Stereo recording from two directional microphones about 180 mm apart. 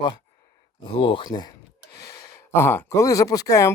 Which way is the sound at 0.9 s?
30° left (ahead or behind).